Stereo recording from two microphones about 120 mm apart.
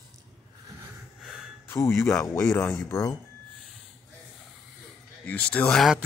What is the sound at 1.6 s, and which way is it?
Speech, 20° left (ahead or behind).